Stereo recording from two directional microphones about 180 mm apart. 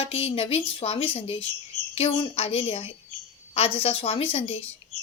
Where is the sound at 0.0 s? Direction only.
35° left (ahead or behind).